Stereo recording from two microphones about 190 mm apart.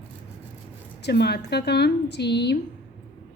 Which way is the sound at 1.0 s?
60° left (ahead or behind).